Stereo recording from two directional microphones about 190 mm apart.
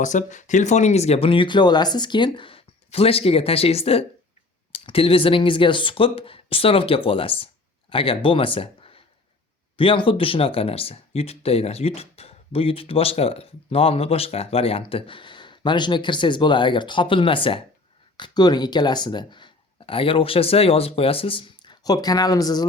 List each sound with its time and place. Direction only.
0.0 s speech: 40° left (ahead or behind); by 22.6 s 20° left (ahead or behind)